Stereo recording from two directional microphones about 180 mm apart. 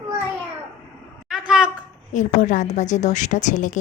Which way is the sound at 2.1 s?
45° left (ahead or behind).